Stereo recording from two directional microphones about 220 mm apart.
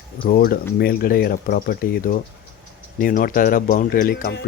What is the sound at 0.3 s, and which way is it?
Speech, 40° left (ahead or behind).